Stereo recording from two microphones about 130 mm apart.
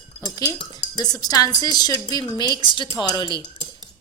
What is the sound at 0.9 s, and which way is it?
A woman's voice, 30° left (ahead or behind).